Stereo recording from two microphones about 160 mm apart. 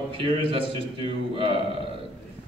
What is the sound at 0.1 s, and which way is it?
A man's voice, 30° right (ahead or behind).